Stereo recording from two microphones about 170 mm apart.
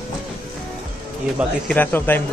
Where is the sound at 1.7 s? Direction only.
10° left (ahead or behind).